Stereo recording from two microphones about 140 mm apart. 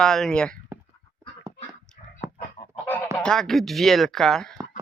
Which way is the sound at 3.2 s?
5° left (ahead or behind).